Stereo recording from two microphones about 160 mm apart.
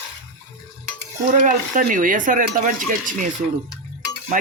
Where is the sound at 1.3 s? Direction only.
55° right (ahead or behind).